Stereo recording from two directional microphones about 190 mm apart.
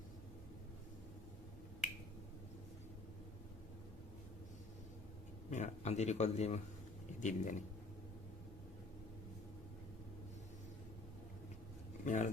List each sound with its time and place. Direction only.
5.5 s a man's voice: 40° left (ahead or behind)
12.0 s a man's voice: 40° left (ahead or behind)